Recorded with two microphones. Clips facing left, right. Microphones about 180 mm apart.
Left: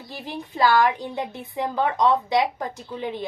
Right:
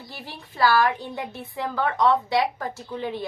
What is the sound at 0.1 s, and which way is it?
A woman's voice, 20° left (ahead or behind).